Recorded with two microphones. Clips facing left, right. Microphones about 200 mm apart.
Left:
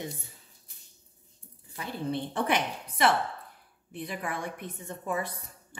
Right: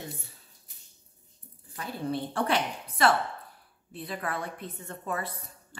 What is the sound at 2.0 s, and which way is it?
A woman's voice, 20° left (ahead or behind).